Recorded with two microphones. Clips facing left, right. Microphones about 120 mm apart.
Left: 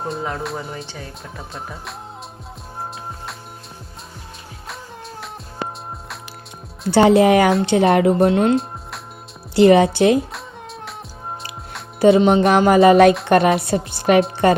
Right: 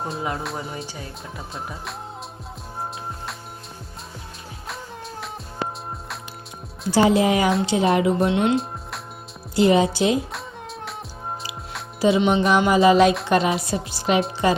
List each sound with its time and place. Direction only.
0.0 s music: centre (ahead or behind)
1.4 s music: centre (ahead or behind)
4.7 s music: centre (ahead or behind)
6.9 s speech: 75° left (ahead or behind)
7.2 s music: 65° left (ahead or behind)
8.3 s speech: 40° left (ahead or behind)
9.6 s music: 65° left (ahead or behind)
10.2 s music: centre (ahead or behind)
11.9 s speech: 55° left (ahead or behind)
12.2 s music: 50° left (ahead or behind)
13.2 s a woman's voice: 60° left (ahead or behind)
13.6 s music: 60° left (ahead or behind)
14.4 s speech: 55° left (ahead or behind)